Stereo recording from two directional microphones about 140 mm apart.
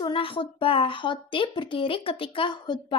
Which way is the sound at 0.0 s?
35° left (ahead or behind).